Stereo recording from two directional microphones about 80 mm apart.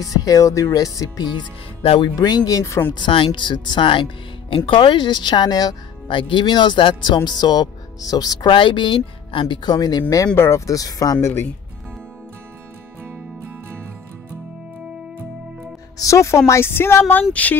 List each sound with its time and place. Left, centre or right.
0.1 s speech: left
2.9 s speech: left
6.0 s speech: left
7.2 s speech: left
8.5 s speech: left
9.8 s speech: left
10.3 s a woman's voice: left
10.7 s speech: left
11.1 s a woman's voice: left
16.0 s a woman's voice: left; by 17.6 s centre